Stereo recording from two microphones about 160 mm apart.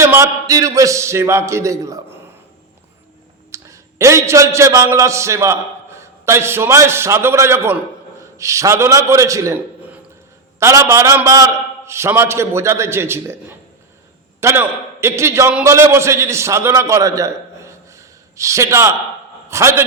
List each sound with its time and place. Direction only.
0.0 s a man's voice: 20° right (ahead or behind)
3.5 s a man's voice: 20° right (ahead or behind)
10.6 s a man's voice: 20° right (ahead or behind)